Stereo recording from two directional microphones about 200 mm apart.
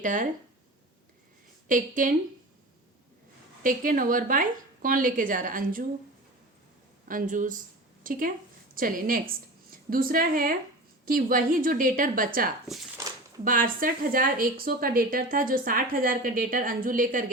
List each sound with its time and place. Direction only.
0.0 s a woman's voice: 40° right (ahead or behind)
1.6 s a woman's voice: 40° right (ahead or behind)
3.6 s a woman's voice: 45° right (ahead or behind)
7.1 s a woman's voice: 40° right (ahead or behind)
12.6 s speech: centre (ahead or behind)
13.4 s a woman's voice: 45° right (ahead or behind)